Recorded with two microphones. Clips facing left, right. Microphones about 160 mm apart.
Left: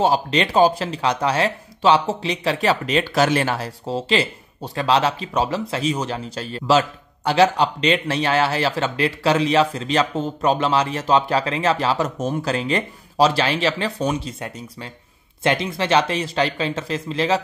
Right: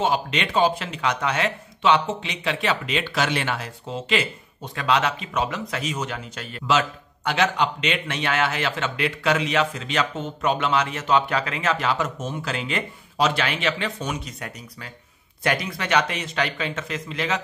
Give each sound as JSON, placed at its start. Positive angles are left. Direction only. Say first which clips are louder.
{"t": 0.0, "sound": "speech", "louder": "left 5 dB", "side_deg": 35}